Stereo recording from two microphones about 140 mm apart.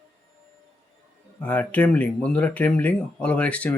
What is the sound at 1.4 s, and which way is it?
Speech, 10° left (ahead or behind).